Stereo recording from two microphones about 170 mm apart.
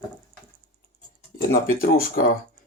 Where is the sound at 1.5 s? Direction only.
60° left (ahead or behind).